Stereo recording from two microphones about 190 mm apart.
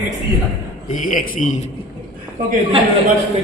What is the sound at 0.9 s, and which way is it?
Speech, 45° left (ahead or behind).